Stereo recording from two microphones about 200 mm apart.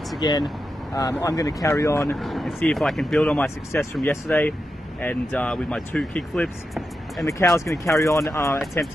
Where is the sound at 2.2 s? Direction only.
Centre (ahead or behind).